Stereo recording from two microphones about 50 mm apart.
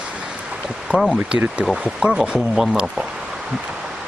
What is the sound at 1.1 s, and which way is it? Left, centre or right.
Speech, right.